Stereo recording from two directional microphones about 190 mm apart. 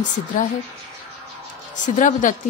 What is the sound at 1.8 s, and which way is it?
Speech, 40° left (ahead or behind).